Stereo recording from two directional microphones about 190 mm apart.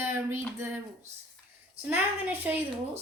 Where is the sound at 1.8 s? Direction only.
10° right (ahead or behind).